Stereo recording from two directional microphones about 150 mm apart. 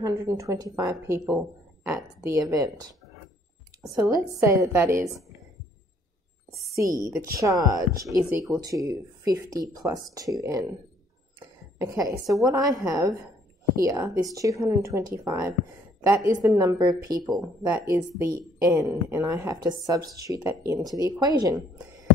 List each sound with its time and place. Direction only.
0.0 s speech: 20° right (ahead or behind)
1.2 s speech: 5° right (ahead or behind)
2.0 s speech: 25° right (ahead or behind)
6.8 s a woman's voice: 25° right (ahead or behind)
17.3 s speech: 5° right (ahead or behind)
17.8 s speech: 20° right (ahead or behind)